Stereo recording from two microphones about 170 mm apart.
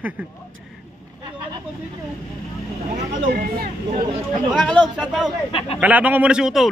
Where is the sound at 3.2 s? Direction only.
60° right (ahead or behind).